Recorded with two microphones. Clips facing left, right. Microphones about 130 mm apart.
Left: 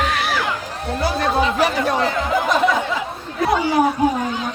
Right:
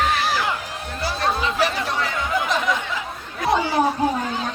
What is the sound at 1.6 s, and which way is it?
Chatter, 45° left (ahead or behind).